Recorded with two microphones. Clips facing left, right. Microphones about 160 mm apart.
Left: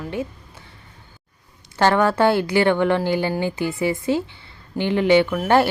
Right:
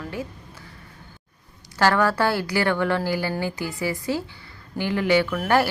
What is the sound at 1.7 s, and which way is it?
A woman's voice, 20° left (ahead or behind).